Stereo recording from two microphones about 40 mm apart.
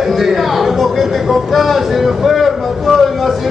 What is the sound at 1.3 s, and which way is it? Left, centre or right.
Speech, centre.